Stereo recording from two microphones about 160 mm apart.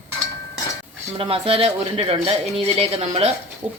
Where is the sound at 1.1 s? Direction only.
35° right (ahead or behind).